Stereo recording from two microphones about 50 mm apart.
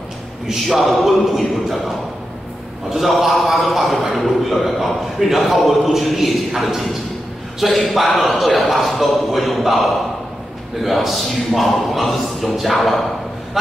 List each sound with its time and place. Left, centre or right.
0.5 s a man's voice: centre